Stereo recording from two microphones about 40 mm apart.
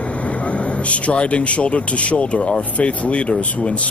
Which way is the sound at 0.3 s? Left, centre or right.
Left.